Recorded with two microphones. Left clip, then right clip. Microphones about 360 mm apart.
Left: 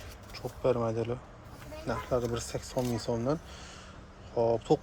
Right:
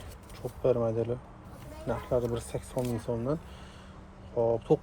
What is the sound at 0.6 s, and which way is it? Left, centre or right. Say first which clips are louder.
Speech: right 2 dB; centre.